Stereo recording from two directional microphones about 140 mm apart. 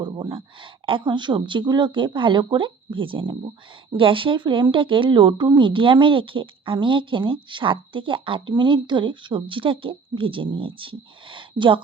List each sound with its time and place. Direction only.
0.0 s speech: 35° right (ahead or behind)